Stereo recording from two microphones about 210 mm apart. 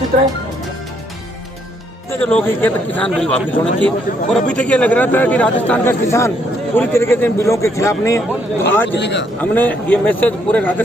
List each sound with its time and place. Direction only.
2.0 s a man's voice: 10° left (ahead or behind)
9.0 s a man's voice: 55° left (ahead or behind)
9.4 s a man's voice: 10° left (ahead or behind)